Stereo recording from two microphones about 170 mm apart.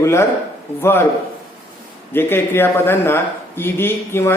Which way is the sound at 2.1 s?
15° left (ahead or behind).